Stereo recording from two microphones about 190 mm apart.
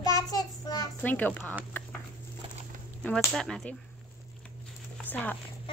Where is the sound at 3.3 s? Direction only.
Centre (ahead or behind).